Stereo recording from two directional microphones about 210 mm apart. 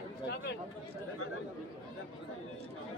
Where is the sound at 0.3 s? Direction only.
50° left (ahead or behind).